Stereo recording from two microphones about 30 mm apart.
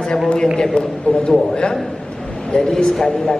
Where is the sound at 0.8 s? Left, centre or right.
Left.